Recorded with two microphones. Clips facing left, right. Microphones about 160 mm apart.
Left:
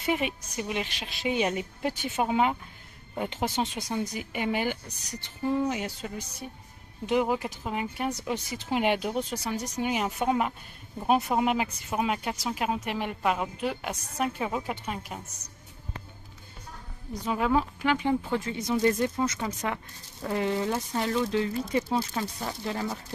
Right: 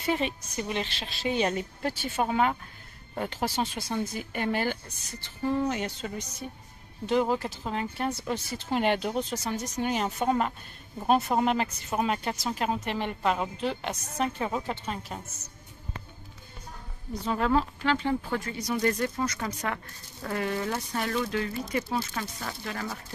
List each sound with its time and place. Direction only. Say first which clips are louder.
0.0 s speech: even; 15° left (ahead or behind)
17.2 s speech: even; 10° left (ahead or behind)